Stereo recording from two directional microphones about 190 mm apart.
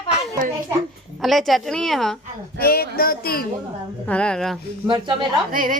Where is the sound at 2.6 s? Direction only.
55° left (ahead or behind).